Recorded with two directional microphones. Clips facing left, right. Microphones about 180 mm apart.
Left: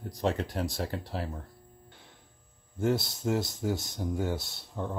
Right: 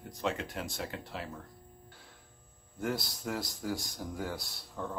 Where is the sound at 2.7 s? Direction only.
25° left (ahead or behind).